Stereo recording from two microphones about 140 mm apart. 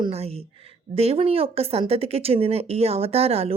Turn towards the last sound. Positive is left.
turn(degrees=-45)  # may be behind; listen again after turning